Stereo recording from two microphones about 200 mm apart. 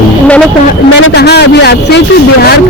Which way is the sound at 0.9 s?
55° left (ahead or behind).